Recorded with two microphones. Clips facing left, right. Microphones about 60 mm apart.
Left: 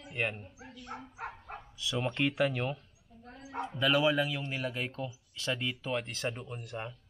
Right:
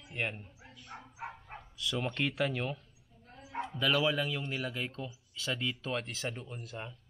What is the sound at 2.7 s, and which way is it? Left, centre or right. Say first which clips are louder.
Dog: left 2 dB; left.